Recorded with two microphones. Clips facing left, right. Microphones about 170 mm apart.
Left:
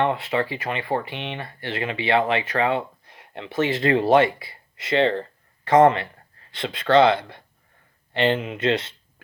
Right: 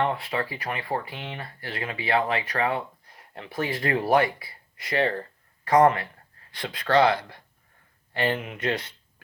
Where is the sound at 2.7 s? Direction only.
25° left (ahead or behind).